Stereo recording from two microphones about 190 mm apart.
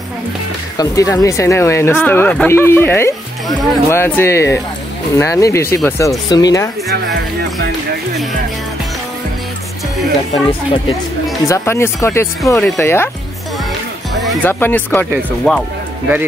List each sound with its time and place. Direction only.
0.7 s speech: 20° left (ahead or behind)
11.4 s speech: 15° left (ahead or behind)
14.2 s speech: 10° left (ahead or behind)